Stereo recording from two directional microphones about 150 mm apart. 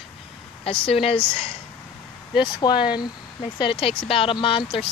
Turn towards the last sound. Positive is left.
turn(degrees=35)  # may be behind; listen again after turning